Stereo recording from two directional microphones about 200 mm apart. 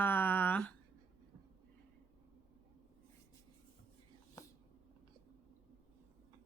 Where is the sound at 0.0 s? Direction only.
10° left (ahead or behind).